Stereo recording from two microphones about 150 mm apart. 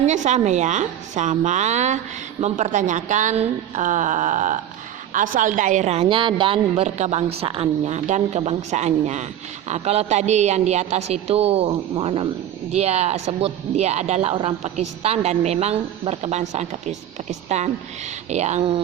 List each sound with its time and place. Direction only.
0.0 s a man's voice: 55° right (ahead or behind)